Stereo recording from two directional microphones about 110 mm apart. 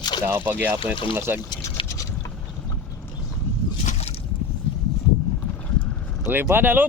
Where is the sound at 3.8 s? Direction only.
80° left.